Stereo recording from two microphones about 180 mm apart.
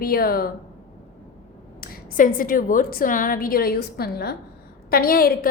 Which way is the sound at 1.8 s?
50° left (ahead or behind).